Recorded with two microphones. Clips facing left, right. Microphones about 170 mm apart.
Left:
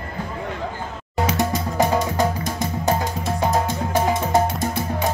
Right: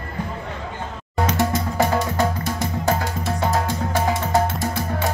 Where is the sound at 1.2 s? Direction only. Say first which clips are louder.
Right 1 dB; 15° left (ahead or behind).